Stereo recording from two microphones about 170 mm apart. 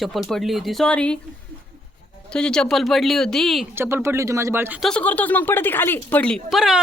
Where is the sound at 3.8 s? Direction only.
15° right (ahead or behind).